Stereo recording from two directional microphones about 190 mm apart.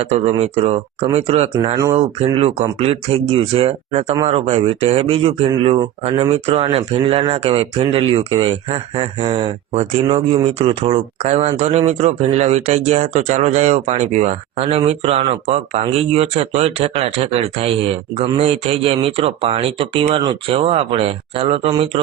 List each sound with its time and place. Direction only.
0.0 s speech: 30° right (ahead or behind)
1.5 s speech: 20° right (ahead or behind)
2.0 s speech: 30° right (ahead or behind)